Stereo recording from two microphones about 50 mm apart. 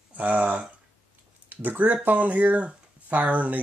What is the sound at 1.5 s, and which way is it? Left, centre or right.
Speech, right.